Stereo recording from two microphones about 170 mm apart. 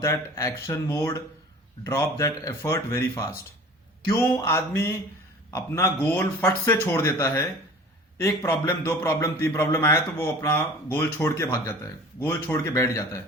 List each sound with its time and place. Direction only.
0.0 s a man's voice: 20° left (ahead or behind)
8.4 s a man's voice: 15° left (ahead or behind)